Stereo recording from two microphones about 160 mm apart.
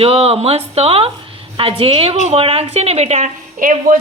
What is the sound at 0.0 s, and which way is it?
A woman's voice, 40° right (ahead or behind).